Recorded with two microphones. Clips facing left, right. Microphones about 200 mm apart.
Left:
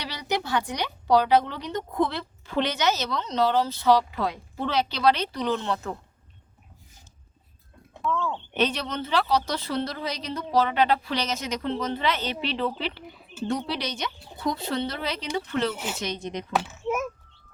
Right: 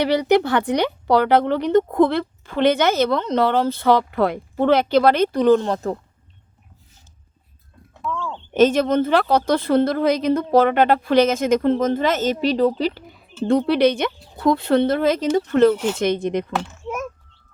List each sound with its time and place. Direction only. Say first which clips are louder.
0.0 s speech: right 14 dB; 60° right (ahead or behind); by 6.0 s 40° right (ahead or behind)
8.0 s a sound: even; centre (ahead or behind)
8.5 s a woman's voice: right 13 dB; 45° right (ahead or behind)
13.5 s speech: right 14 dB; 55° right (ahead or behind)
16.5 s speech: even; 5° left (ahead or behind)